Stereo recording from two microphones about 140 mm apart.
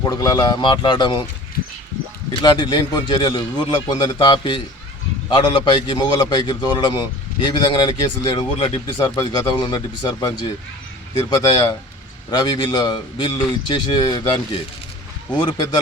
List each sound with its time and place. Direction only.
0.0 s a man's voice: 25° left (ahead or behind)
2.4 s a man's voice: 35° left (ahead or behind)